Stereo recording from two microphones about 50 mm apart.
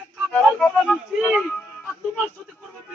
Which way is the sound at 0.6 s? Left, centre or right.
Centre.